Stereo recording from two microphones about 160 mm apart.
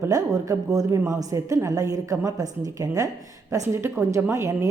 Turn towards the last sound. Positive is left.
turn(degrees=-20)  # may be behind; listen again after turning